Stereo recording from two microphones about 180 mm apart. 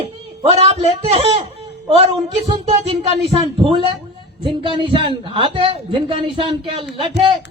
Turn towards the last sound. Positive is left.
turn(degrees=-30)  # may be behind; listen again after turning